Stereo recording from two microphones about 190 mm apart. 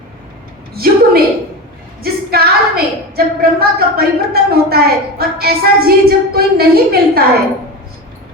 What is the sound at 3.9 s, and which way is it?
A woman's voice, 55° right (ahead or behind).